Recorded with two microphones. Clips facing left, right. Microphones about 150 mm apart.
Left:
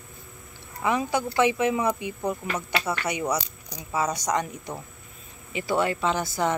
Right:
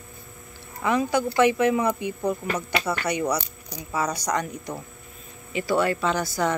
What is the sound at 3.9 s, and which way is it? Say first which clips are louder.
A woman's voice: even; 25° left (ahead or behind).